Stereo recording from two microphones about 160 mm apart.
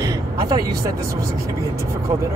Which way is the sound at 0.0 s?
20° right (ahead or behind).